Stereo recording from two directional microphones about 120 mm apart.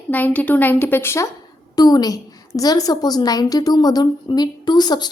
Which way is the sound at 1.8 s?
30° left (ahead or behind).